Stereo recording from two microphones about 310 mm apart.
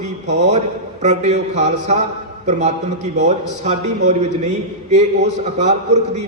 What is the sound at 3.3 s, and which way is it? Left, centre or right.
A man's voice, right.